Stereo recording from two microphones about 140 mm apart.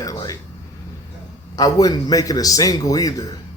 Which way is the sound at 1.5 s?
25° left (ahead or behind).